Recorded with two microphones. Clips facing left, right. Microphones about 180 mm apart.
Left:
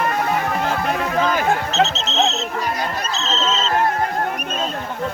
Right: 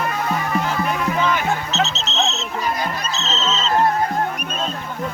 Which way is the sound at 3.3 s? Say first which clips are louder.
Left 2 dB; 50° left (ahead or behind).